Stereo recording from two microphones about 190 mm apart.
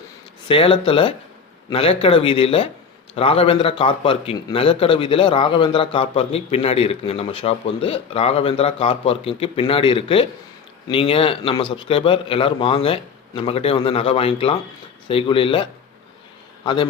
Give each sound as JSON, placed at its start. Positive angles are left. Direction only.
{"t": 0.4, "sound": "a man's voice", "side_deg": 30}